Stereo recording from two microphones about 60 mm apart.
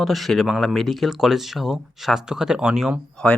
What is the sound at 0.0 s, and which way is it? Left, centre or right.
Speech, centre.